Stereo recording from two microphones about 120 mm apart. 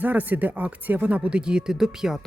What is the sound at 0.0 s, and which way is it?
Speech, 15° right (ahead or behind).